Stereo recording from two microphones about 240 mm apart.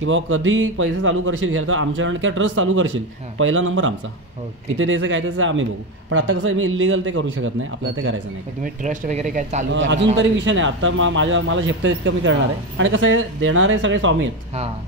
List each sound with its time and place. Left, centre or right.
0.0 s speech: right
8.6 s speech: right
9.8 s speech: right